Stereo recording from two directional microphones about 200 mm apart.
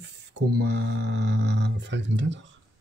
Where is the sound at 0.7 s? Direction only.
60° right (ahead or behind).